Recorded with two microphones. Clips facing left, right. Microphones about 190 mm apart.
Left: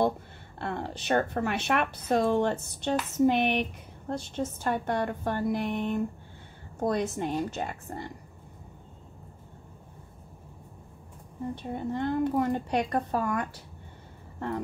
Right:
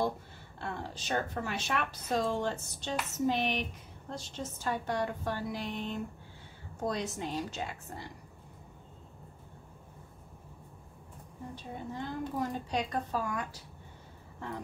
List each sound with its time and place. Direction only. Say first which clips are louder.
0.6 s a woman's voice: left 6 dB; 60° left (ahead or behind)
11.5 s a woman's voice: left 7 dB; 65° left (ahead or behind)